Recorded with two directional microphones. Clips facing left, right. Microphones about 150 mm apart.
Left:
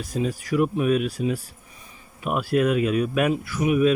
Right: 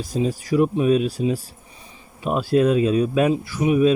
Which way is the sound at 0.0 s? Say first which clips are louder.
Right 3 dB; 30° right (ahead or behind).